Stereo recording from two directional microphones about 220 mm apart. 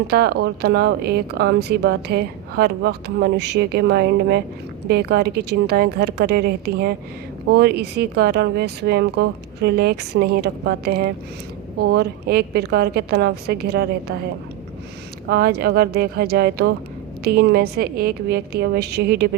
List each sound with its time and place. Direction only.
0.1 s speech: 45° right (ahead or behind)
15.3 s speech: 45° right (ahead or behind)